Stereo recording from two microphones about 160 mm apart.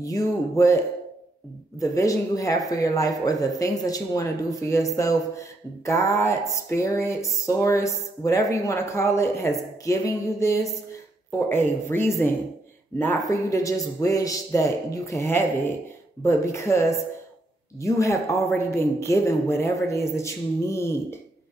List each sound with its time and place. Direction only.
0.0 s speech: 20° left (ahead or behind)
1.8 s speech: 20° left (ahead or behind)